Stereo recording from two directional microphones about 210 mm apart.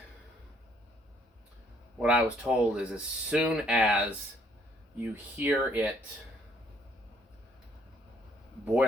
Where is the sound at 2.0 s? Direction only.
5° right (ahead or behind).